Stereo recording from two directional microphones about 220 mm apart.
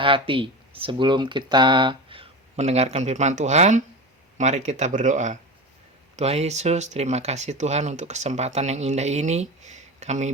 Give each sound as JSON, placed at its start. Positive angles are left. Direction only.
{"t": 0.0, "sound": "speech", "side_deg": -25}